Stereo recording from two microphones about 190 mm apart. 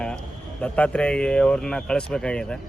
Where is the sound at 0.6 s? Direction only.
5° left (ahead or behind).